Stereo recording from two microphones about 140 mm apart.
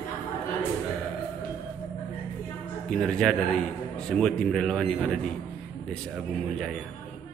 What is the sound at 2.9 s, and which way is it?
A man's voice, 5° left (ahead or behind).